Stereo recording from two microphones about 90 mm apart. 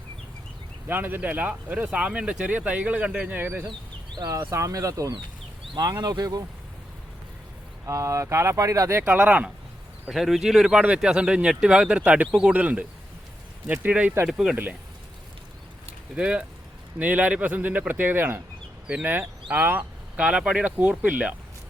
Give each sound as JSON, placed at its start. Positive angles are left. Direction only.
{"t": 0.9, "sound": "speech", "side_deg": -20}
{"t": 4.4, "sound": "speech", "side_deg": -35}
{"t": 7.9, "sound": "speech", "side_deg": -35}
{"t": 9.1, "sound": "speech", "side_deg": -15}
{"t": 10.1, "sound": "speech", "side_deg": 0}
{"t": 14.3, "sound": "speech", "side_deg": -5}
{"t": 14.5, "sound": "a man's voice", "side_deg": -20}
{"t": 16.1, "sound": "a man's voice", "side_deg": -15}